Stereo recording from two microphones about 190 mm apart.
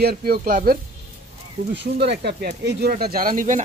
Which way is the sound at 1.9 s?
60° right (ahead or behind).